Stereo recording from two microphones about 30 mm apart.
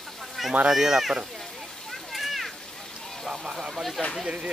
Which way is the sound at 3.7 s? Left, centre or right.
Centre.